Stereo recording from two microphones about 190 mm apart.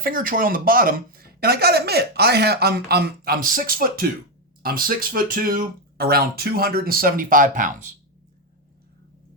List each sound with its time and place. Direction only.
0.0 s speech: 45° right (ahead or behind)